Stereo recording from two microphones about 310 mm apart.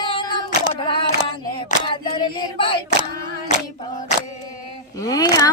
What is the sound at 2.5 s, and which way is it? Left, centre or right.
Choir, centre.